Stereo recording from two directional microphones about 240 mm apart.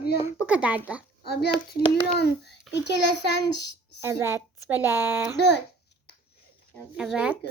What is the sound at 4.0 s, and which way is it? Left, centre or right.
A woman's voice, centre.